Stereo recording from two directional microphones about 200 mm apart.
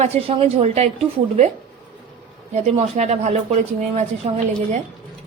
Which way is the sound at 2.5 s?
35° right (ahead or behind).